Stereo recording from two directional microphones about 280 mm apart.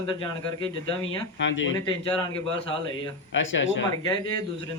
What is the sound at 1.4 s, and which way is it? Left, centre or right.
Speech, left.